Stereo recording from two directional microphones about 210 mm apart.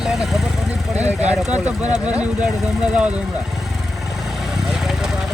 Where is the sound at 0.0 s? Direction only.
Centre (ahead or behind).